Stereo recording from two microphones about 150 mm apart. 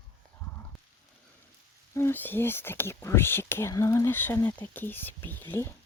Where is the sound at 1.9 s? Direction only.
15° left (ahead or behind).